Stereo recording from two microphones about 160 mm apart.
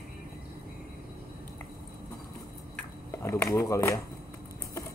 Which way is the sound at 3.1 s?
15° left (ahead or behind).